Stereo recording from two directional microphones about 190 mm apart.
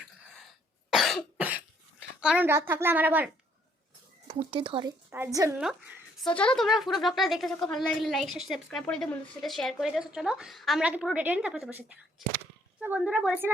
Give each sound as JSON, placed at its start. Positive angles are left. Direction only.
{"t": 0.9, "sound": "cough", "side_deg": 0}
{"t": 2.2, "sound": "a woman's voice", "side_deg": -5}
{"t": 4.3, "sound": "a woman's voice", "side_deg": -30}
{"t": 6.3, "sound": "speech", "side_deg": 5}
{"t": 13.1, "sound": "a woman's voice", "side_deg": -5}